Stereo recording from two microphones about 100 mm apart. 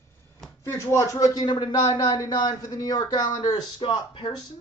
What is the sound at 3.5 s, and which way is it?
Speech, 55° left (ahead or behind).